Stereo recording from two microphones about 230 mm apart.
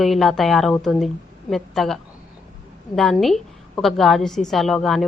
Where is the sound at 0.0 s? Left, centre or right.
Centre.